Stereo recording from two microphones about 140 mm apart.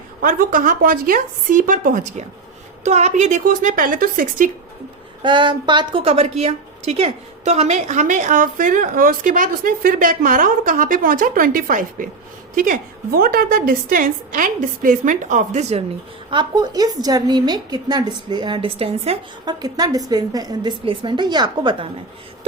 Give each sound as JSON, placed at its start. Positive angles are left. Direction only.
{"t": 0.2, "sound": "a woman's voice", "side_deg": -85}
{"t": 2.8, "sound": "a woman's voice", "side_deg": -55}
{"t": 5.2, "sound": "a woman's voice", "side_deg": -35}
{"t": 16.3, "sound": "a woman's voice", "side_deg": -30}
{"t": 19.5, "sound": "a woman's voice", "side_deg": -25}